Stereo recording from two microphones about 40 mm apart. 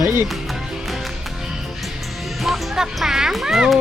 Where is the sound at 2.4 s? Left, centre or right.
Centre.